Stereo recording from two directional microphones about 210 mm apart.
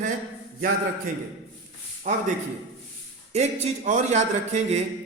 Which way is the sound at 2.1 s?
35° right (ahead or behind).